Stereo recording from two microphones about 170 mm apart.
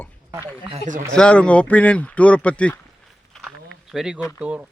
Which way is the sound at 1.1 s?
5° left (ahead or behind).